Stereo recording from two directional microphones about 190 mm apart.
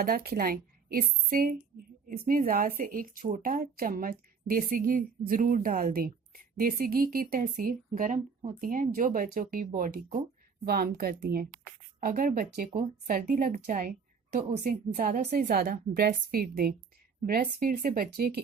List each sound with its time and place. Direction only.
0.0 s speech: 50° right (ahead or behind)